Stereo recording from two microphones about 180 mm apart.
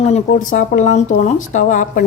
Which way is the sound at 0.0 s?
40° left (ahead or behind).